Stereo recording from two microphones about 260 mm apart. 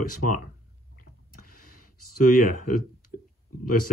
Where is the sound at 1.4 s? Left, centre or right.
Left.